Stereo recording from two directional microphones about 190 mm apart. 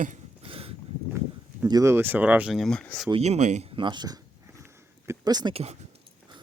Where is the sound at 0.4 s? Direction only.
30° right (ahead or behind).